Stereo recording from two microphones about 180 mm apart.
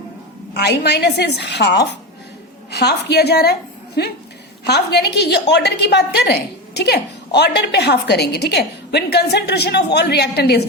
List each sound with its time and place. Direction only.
0.5 s a woman's voice: 65° left (ahead or behind)